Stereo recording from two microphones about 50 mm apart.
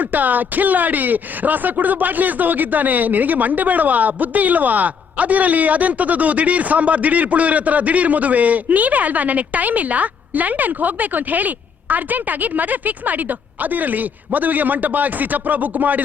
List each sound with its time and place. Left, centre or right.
0.0 s speech: right